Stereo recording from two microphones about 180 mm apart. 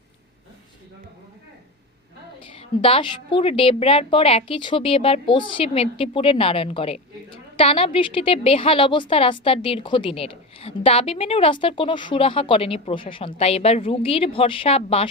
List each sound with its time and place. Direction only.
2.4 s a woman's voice: 30° left (ahead or behind)